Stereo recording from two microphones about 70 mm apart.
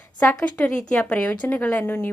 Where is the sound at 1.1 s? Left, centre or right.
Left.